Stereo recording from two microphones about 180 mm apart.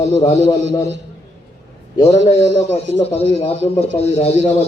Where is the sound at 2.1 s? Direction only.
35° left (ahead or behind).